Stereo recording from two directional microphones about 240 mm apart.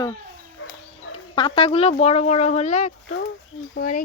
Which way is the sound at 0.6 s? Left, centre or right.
Left.